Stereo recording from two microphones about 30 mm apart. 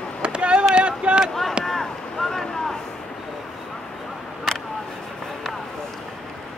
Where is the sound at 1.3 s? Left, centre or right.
Centre.